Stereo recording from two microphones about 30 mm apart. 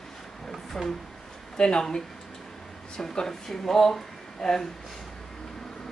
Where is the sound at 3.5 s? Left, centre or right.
Centre.